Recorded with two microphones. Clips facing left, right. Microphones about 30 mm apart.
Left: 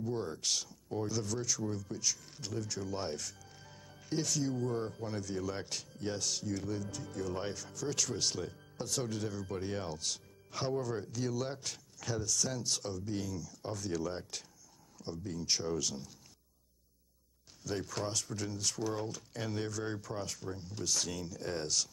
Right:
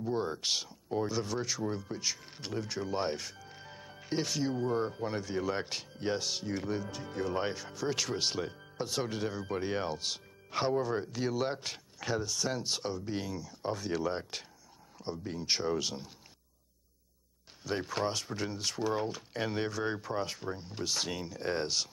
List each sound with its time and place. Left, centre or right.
0.0 s speech: right
17.6 s speech: right